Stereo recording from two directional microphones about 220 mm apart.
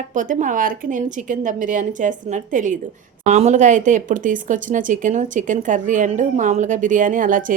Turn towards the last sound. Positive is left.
turn(degrees=-35)  # may be behind; listen again after turning